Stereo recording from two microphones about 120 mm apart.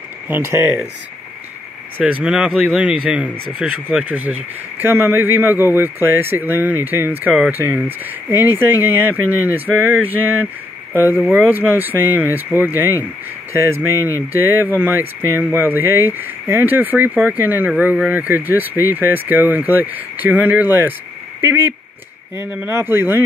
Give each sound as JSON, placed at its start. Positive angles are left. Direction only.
{"t": 0.3, "sound": "speech", "side_deg": -20}
{"t": 2.2, "sound": "speech", "side_deg": -5}